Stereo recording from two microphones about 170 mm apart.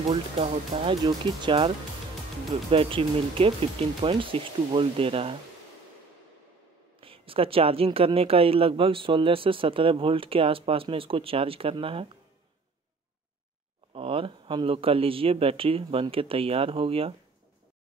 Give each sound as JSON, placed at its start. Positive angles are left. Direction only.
{"t": 0.1, "sound": "speech", "side_deg": -35}
{"t": 2.7, "sound": "speech", "side_deg": -35}
{"t": 7.0, "sound": "speech", "side_deg": -30}
{"t": 13.9, "sound": "speech", "side_deg": -35}